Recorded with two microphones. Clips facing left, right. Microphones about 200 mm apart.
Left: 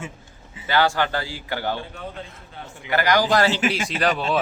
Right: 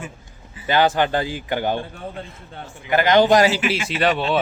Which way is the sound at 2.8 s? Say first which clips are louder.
Right 5 dB; 20° right (ahead or behind).